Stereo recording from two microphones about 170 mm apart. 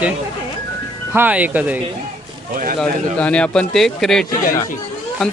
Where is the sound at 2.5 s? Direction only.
55° right (ahead or behind).